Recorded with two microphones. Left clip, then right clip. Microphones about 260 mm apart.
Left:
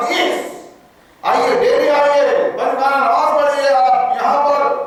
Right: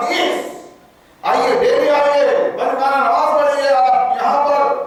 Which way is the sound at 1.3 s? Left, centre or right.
Centre.